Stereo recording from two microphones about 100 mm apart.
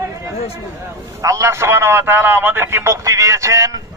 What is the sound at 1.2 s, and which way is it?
A man's voice, 35° right (ahead or behind).